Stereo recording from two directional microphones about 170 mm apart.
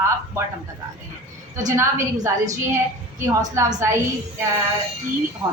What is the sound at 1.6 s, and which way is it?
A woman's voice, 15° right (ahead or behind).